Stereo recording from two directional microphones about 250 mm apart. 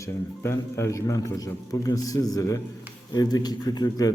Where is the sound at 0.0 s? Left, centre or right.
Centre.